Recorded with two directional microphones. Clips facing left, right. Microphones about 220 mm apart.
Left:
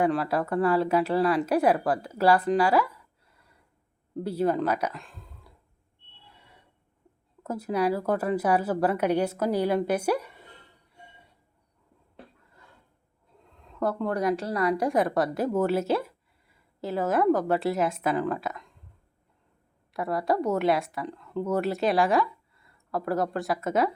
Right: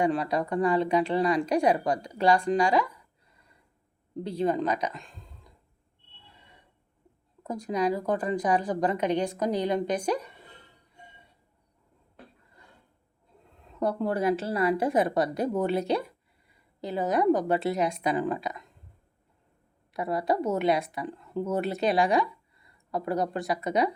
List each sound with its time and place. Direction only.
0.0 s a woman's voice: 5° left (ahead or behind)
4.1 s speech: 5° left (ahead or behind)
7.4 s a woman's voice: 5° left (ahead or behind)
13.8 s a woman's voice: centre (ahead or behind)
14.4 s a woman's voice: 25° right (ahead or behind)
14.7 s a woman's voice: centre (ahead or behind)
19.9 s a woman's voice: centre (ahead or behind)